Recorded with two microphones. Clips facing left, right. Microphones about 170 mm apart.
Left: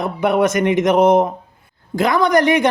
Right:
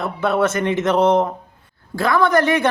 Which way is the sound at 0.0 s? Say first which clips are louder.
Left 3 dB; 15° left (ahead or behind).